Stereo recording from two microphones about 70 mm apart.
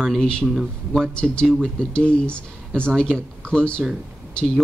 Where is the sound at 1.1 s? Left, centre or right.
Centre.